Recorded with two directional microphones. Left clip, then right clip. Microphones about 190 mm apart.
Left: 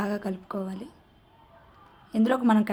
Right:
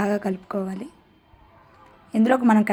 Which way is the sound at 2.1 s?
20° right (ahead or behind).